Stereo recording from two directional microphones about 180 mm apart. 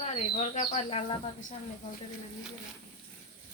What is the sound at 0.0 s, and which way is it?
Speech, 40° left (ahead or behind).